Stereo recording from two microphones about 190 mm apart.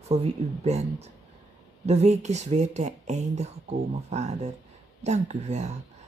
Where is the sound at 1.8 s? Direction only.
35° right (ahead or behind).